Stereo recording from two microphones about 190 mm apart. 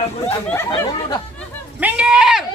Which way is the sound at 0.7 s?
25° left (ahead or behind).